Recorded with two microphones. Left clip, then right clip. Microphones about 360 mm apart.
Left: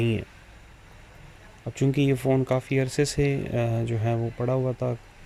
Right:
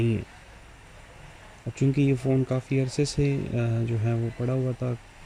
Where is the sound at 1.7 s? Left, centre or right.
Centre.